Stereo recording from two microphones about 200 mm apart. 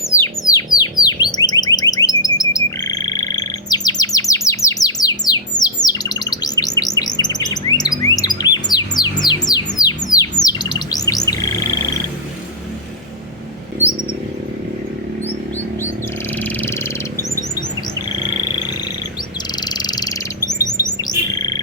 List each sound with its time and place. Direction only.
0.0 s alarm: 15° left (ahead or behind)
9.2 s music: 20° left (ahead or behind)
10.4 s bird: 20° left (ahead or behind)
16.4 s a sound: 10° left (ahead or behind)
19.5 s bird: 20° left (ahead or behind)